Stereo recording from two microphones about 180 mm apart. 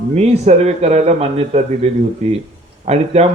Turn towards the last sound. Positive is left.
turn(degrees=-35)  # may be behind; listen again after turning